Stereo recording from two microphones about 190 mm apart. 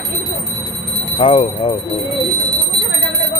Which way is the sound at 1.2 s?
30° left (ahead or behind).